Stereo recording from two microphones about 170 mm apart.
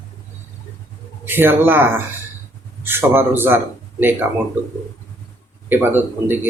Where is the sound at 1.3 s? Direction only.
10° right (ahead or behind).